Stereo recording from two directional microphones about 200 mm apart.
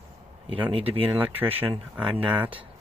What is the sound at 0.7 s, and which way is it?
Speech, 30° right (ahead or behind).